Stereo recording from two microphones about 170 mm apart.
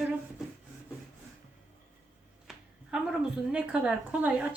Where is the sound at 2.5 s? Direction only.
5° right (ahead or behind).